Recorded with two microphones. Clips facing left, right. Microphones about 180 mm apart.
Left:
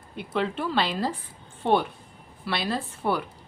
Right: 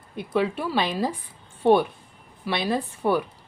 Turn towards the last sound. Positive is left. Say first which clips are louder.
# right 4 dB
turn(degrees=-15)  # may be behind; listen again after turning